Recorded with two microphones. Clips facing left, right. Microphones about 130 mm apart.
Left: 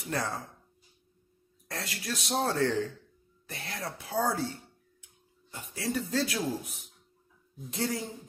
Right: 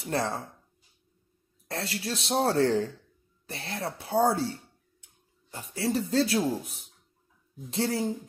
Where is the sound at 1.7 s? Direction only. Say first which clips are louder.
Right 4 dB; 30° right (ahead or behind).